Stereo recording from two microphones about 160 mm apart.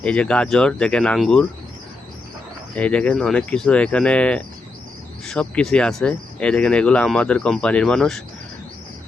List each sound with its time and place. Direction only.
0.0 s speech: 5° left (ahead or behind)
2.7 s speech: 5° left (ahead or behind)